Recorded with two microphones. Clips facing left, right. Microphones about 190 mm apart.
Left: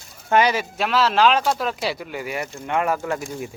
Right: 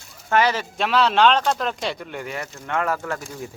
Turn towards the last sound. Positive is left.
turn(degrees=15)  # may be behind; listen again after turning